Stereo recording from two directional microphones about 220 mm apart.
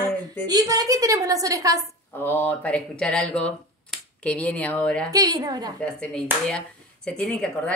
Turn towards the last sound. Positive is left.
turn(degrees=5)  # may be behind; listen again after turning